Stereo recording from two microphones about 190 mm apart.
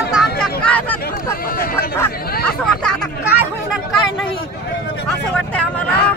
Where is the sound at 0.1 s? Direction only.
Centre (ahead or behind).